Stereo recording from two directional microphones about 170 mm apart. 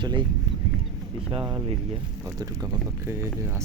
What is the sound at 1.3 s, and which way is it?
Speech, 30° right (ahead or behind).